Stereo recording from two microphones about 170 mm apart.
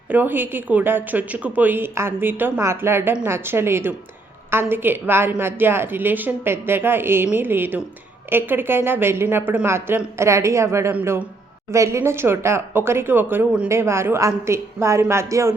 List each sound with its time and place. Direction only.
0.1 s a woman's voice: 10° right (ahead or behind)